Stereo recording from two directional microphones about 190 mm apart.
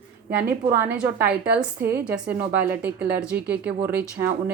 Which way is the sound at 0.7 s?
10° right (ahead or behind).